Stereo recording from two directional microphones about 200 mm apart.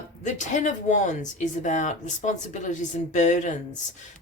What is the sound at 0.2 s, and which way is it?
A woman's voice, 40° left (ahead or behind).